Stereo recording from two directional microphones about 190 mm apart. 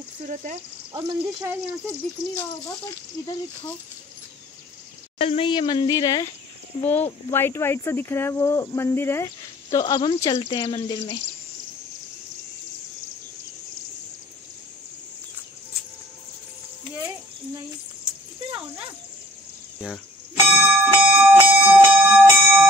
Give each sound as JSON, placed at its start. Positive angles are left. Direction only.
{"t": 0.3, "sound": "speech", "side_deg": -40}
{"t": 1.2, "sound": "speech", "side_deg": -15}
{"t": 3.2, "sound": "speech", "side_deg": 20}
{"t": 5.2, "sound": "speech", "side_deg": 30}
{"t": 20.4, "sound": "music", "side_deg": -5}
{"t": 21.5, "sound": "bell", "side_deg": -10}